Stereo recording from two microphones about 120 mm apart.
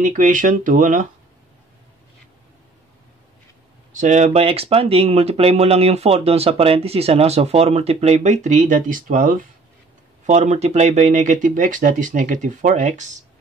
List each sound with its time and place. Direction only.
0.0 s speech: 90° right
3.9 s speech: 85° right
10.2 s speech: 70° right (ahead or behind); by 13.2 s 90° right